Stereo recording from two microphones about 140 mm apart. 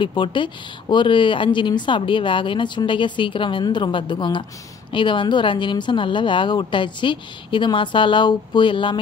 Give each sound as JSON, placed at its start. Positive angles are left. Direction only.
{"t": 0.0, "sound": "speech", "side_deg": 35}